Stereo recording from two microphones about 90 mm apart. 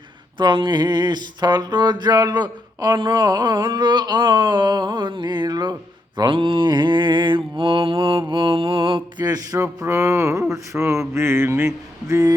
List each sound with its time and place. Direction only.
0.3 s a sound: 60° right (ahead or behind)
6.1 s mantra: 65° right (ahead or behind)
9.2 s speech: 45° right (ahead or behind)
11.1 s mantra: 30° right (ahead or behind)